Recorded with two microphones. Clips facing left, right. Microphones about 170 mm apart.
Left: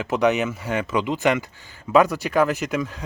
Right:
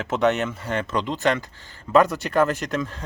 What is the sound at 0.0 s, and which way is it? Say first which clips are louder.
Speech: left 1 dB; centre (ahead or behind).